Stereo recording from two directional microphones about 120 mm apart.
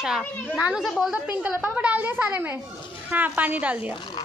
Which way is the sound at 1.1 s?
10° right (ahead or behind).